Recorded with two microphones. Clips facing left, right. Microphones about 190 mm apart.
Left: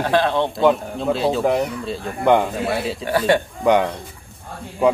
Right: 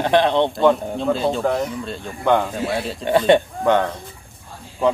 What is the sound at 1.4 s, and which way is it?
Speech, 15° left (ahead or behind).